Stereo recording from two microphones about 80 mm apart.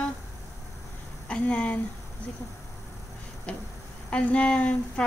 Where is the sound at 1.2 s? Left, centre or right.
Centre.